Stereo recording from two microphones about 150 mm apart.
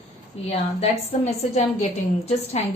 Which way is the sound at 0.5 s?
45° left (ahead or behind).